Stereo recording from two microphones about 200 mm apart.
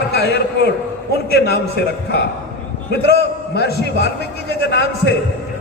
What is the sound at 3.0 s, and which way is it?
A man's voice, 55° left (ahead or behind).